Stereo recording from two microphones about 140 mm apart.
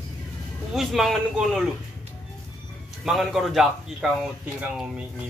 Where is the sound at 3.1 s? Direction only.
Centre (ahead or behind).